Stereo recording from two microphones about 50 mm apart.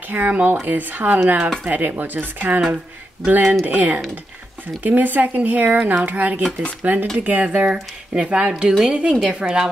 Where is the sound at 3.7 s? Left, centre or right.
Right.